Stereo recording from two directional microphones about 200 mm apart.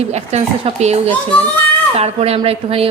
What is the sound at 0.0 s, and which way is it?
A woman's voice, 35° right (ahead or behind).